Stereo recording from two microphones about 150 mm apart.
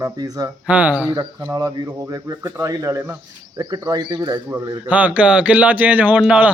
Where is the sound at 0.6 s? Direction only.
10° right (ahead or behind).